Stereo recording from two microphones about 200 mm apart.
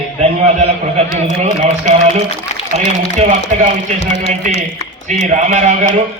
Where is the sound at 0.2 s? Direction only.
35° right (ahead or behind).